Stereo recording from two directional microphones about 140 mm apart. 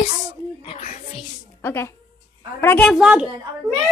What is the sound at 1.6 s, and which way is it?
A woman's voice, 15° left (ahead or behind).